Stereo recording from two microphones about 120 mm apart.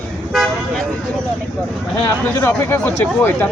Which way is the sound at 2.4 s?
20° left (ahead or behind).